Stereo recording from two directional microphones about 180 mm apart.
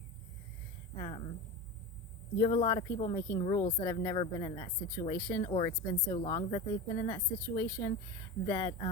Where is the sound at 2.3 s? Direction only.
30° left (ahead or behind).